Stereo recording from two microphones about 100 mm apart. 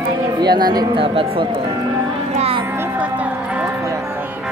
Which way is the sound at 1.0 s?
65° right (ahead or behind).